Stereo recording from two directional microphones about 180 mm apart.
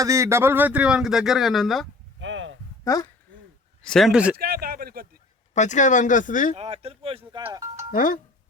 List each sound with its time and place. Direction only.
0.0 s speech: 15° right (ahead or behind); by 1.9 s centre (ahead or behind)
2.2 s a sound: 90° right
2.8 s speech: 20° left (ahead or behind)
3.8 s speech: centre (ahead or behind)
4.4 s speech: 55° right (ahead or behind)
5.5 s speech: 40° left (ahead or behind)
6.5 s speech: 35° right (ahead or behind)
7.9 s speech: 50° left (ahead or behind)